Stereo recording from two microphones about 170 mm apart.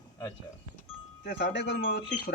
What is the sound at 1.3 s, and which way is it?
Speech, 90° left.